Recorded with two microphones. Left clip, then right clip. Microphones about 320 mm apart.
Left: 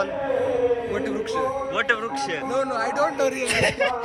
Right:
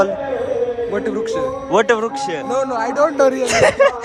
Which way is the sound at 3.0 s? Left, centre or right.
Right.